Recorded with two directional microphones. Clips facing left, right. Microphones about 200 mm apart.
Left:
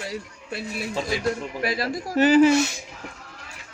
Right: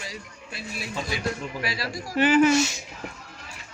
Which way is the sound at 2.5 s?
60° left (ahead or behind).